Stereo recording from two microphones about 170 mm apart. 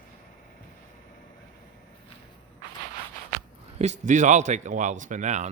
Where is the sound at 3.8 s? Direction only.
45° right (ahead or behind).